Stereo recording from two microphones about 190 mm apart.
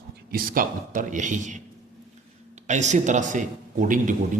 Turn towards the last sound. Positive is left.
turn(degrees=-45)  # may be behind; listen again after turning